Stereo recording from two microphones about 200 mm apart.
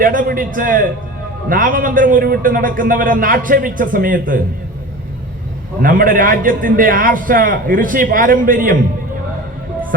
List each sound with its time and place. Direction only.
0.0 s a man's voice: 45° right (ahead or behind)
5.8 s a man's voice: 45° right (ahead or behind)